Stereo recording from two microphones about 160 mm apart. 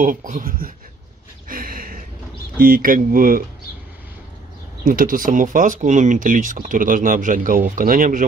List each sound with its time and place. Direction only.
0.0 s speech: 55° right (ahead or behind)
1.5 s a sound: 60° right (ahead or behind)
2.6 s speech: 60° right (ahead or behind)
4.8 s speech: 60° right (ahead or behind)